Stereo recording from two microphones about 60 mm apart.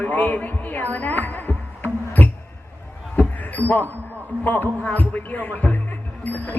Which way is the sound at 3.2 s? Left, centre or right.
Left.